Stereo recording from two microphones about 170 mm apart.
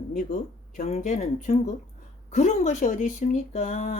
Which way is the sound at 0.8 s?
40° left (ahead or behind).